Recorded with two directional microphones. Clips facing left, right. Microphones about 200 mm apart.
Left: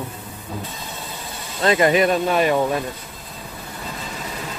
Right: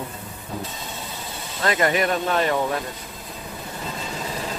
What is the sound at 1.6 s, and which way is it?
Speech, 20° left (ahead or behind).